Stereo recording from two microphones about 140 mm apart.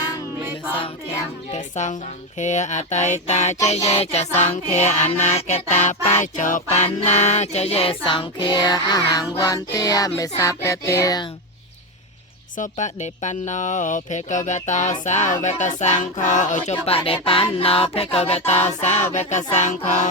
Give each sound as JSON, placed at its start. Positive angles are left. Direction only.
{"t": 1.5, "sound": "a woman's voice", "side_deg": 60}
{"t": 3.7, "sound": "a sound", "side_deg": 50}
{"t": 5.2, "sound": "music", "side_deg": 55}
{"t": 12.5, "sound": "speech", "side_deg": 65}
{"t": 15.0, "sound": "a sound", "side_deg": 60}
{"t": 18.8, "sound": "speech", "side_deg": 55}